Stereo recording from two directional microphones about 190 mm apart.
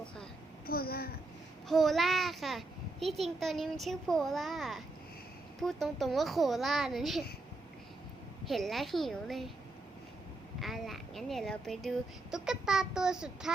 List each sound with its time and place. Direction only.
0.7 s a sound: 55° left (ahead or behind)
1.6 s a child's voice: centre (ahead or behind)
8.4 s speech: centre (ahead or behind)
10.6 s speech: centre (ahead or behind)